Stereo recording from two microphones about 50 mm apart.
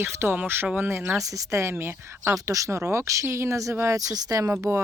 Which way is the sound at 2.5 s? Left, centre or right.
Right.